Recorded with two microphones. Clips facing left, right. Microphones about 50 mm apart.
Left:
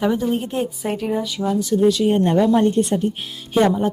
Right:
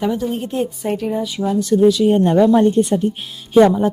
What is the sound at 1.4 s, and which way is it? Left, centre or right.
Speech, left.